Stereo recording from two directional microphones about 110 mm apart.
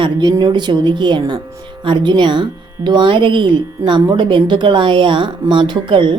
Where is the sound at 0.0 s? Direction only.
40° right (ahead or behind).